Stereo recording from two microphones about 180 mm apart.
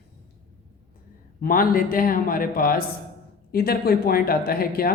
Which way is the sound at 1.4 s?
50° left (ahead or behind).